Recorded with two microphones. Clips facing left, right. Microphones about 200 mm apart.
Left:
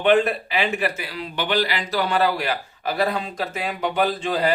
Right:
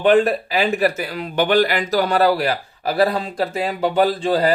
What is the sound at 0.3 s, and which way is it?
Speech, 40° right (ahead or behind).